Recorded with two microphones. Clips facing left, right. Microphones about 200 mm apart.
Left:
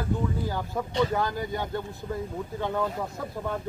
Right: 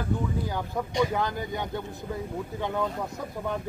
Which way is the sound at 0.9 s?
15° right (ahead or behind).